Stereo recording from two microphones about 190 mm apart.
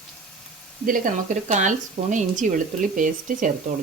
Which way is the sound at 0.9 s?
45° right (ahead or behind).